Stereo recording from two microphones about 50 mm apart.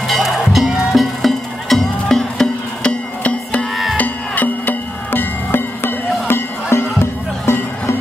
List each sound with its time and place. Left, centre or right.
0.0 s music: centre
2.8 s music: left